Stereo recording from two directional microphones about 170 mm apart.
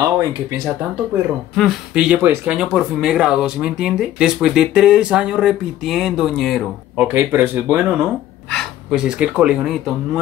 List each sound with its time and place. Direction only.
0.0 s speech: 20° right (ahead or behind)
1.5 s speech: centre (ahead or behind)
7.1 s speech: 10° right (ahead or behind)
8.5 s speech: centre (ahead or behind)